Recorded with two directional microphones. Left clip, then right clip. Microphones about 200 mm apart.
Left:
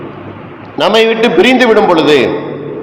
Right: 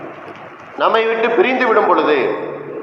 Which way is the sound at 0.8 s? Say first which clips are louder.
Left 6 dB; 65° left (ahead or behind).